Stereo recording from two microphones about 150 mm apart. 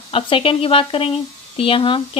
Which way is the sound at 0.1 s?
40° left (ahead or behind).